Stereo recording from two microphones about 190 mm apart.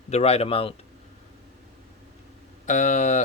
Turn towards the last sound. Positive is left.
turn(degrees=40)  # may be behind; listen again after turning